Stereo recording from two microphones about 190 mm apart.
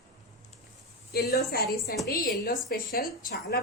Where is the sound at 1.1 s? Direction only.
55° left (ahead or behind).